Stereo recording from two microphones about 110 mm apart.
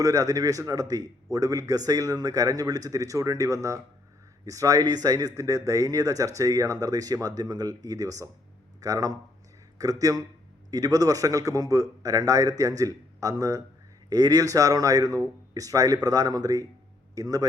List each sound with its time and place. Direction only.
0.0 s a man's voice: 30° right (ahead or behind)